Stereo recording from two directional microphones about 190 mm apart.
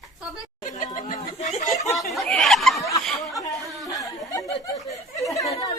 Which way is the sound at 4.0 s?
15° left (ahead or behind).